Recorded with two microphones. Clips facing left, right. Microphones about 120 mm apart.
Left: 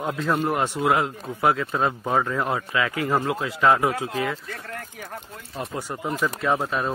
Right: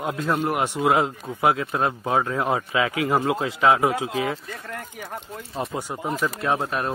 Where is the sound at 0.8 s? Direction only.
25° right (ahead or behind).